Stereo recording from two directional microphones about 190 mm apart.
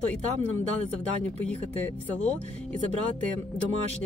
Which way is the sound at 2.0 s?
10° left (ahead or behind).